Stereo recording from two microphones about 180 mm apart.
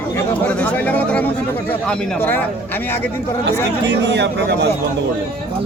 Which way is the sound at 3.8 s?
70° right (ahead or behind).